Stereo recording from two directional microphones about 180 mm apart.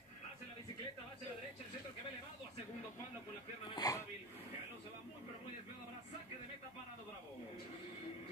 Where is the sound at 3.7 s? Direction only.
20° left (ahead or behind).